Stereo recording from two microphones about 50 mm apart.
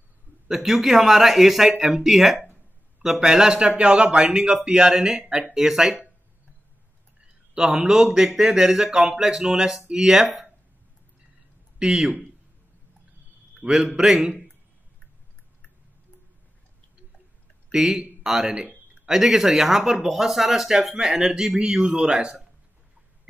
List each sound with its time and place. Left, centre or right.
0.5 s speech: centre
7.5 s speech: centre
11.8 s speech: centre
13.6 s a man's voice: right
13.9 s speech: centre
17.6 s speech: centre